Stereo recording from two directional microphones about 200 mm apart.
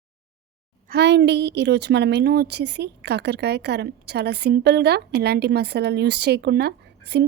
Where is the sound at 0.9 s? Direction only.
55° right (ahead or behind).